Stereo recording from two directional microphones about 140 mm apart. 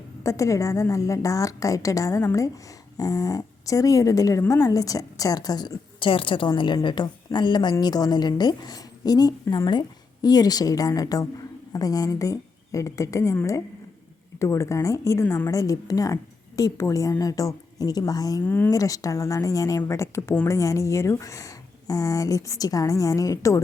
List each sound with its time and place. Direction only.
0.2 s speech: 20° left (ahead or behind)
18.4 s speech: 10° left (ahead or behind)
18.7 s speech: 25° left (ahead or behind)